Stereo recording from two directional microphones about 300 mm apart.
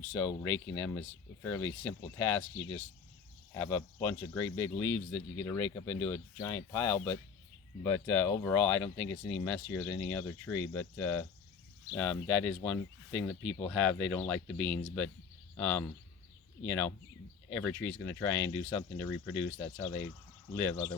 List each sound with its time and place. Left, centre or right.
0.1 s speech: centre
3.5 s speech: centre